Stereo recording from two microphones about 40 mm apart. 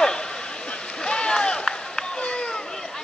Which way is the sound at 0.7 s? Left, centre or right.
Left.